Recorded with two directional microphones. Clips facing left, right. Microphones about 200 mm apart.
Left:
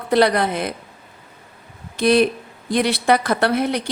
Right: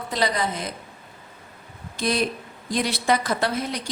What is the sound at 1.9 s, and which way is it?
A woman's voice, 65° left (ahead or behind).